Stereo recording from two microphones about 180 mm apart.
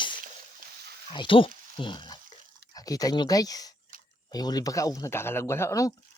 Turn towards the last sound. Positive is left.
turn(degrees=15)  # may be behind; listen again after turning